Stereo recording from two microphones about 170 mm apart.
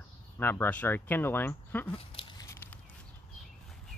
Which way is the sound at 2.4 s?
15° left (ahead or behind).